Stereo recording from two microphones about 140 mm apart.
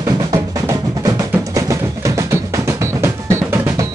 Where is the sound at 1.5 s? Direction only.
20° right (ahead or behind).